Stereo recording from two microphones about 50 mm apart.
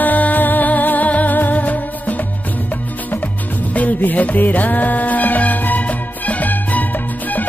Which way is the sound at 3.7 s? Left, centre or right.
Left.